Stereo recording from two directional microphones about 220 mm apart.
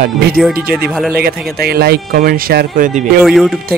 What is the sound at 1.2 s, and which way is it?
A man's voice, 45° right (ahead or behind).